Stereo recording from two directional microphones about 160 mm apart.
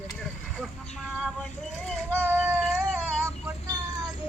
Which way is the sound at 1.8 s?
5° left (ahead or behind).